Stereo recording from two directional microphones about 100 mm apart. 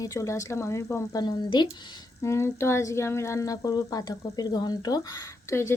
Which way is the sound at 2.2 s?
25° left (ahead or behind).